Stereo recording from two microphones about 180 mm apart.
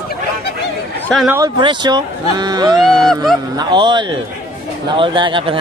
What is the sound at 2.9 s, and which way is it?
Speech, centre (ahead or behind).